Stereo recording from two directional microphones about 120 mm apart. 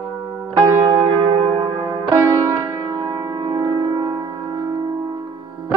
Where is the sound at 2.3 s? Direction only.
25° right (ahead or behind).